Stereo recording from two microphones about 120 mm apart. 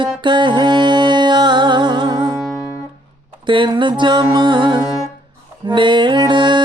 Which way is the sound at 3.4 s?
40° right (ahead or behind).